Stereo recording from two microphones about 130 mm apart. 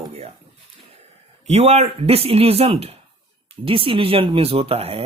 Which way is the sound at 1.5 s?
55° right (ahead or behind).